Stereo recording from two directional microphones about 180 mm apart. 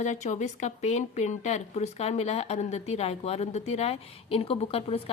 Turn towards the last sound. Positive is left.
turn(degrees=35)  # may be behind; listen again after turning